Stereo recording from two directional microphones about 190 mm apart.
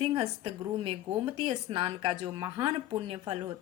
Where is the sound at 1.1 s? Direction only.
30° right (ahead or behind).